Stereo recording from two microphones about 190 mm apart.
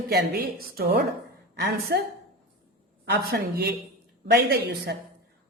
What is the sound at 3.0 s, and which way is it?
A woman's voice, 60° right (ahead or behind).